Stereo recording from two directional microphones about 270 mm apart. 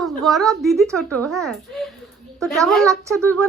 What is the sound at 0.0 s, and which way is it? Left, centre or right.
Speech, centre.